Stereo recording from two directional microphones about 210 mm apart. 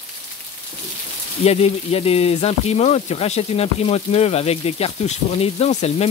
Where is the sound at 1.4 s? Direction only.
30° left (ahead or behind).